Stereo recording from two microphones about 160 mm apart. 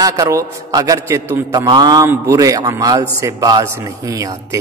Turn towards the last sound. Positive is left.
turn(degrees=-20)  # may be behind; listen again after turning